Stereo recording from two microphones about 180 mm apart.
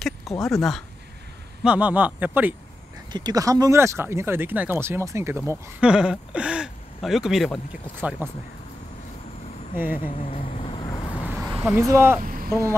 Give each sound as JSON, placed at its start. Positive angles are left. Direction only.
{"t": 0.0, "sound": "speech", "side_deg": 0}
{"t": 3.1, "sound": "speech", "side_deg": -25}
{"t": 8.0, "sound": "speech", "side_deg": -10}
{"t": 10.3, "sound": "vehicle", "side_deg": 30}
{"t": 11.2, "sound": "a sound", "side_deg": -5}
{"t": 11.9, "sound": "speech", "side_deg": -15}
{"t": 12.2, "sound": "vehicle", "side_deg": -50}